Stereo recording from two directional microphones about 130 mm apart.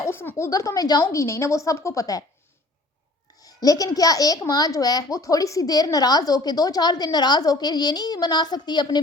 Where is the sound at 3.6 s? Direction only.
30° left (ahead or behind).